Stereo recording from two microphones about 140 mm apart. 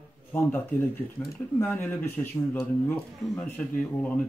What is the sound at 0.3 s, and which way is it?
Speech, 10° left (ahead or behind).